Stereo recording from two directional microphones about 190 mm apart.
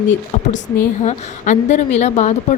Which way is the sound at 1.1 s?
40° left (ahead or behind).